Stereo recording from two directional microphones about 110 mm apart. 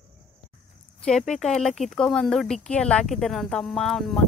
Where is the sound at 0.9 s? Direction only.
5° left (ahead or behind).